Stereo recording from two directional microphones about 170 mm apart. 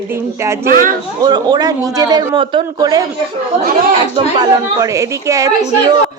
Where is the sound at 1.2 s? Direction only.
25° right (ahead or behind).